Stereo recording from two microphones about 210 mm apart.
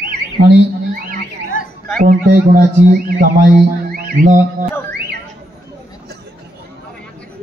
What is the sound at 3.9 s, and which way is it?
Music, 40° right (ahead or behind).